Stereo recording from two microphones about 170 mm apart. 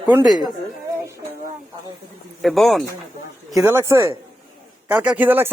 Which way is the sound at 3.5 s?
15° right (ahead or behind).